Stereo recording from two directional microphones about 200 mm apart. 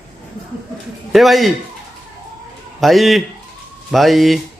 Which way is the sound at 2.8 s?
Centre (ahead or behind).